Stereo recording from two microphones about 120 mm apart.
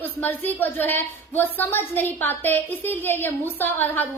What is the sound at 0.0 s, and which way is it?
A woman's voice, 15° left (ahead or behind).